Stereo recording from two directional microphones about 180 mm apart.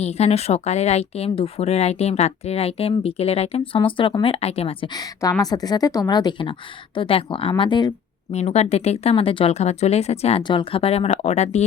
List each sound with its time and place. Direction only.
0.0 s speech: 35° left (ahead or behind)
4.9 s a woman's voice: 20° left (ahead or behind)
8.3 s speech: 35° left (ahead or behind)